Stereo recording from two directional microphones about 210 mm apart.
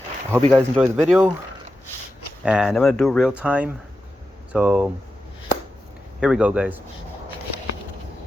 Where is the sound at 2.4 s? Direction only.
5° right (ahead or behind).